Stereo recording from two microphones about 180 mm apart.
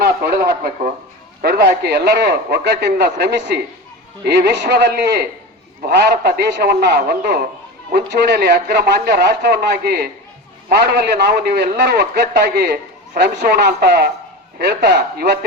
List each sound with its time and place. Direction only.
0.0 s a man's voice: 60° right (ahead or behind)